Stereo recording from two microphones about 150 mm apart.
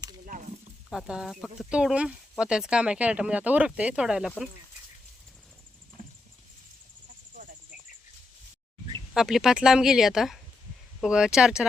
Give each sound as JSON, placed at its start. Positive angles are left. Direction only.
{"t": 0.3, "sound": "snake", "side_deg": -60}
{"t": 0.9, "sound": "speech", "side_deg": -5}
{"t": 9.1, "sound": "speech", "side_deg": -5}